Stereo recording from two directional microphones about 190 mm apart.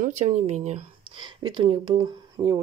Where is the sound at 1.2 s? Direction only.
25° right (ahead or behind).